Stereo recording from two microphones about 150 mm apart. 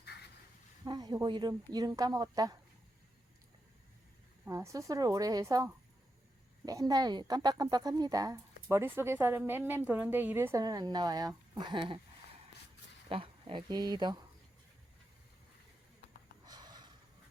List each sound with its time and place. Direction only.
0.9 s a woman's voice: 25° right (ahead or behind)
4.4 s a woman's voice: 20° right (ahead or behind)
13.1 s speech: 40° right (ahead or behind)
16.5 s snort: 30° right (ahead or behind)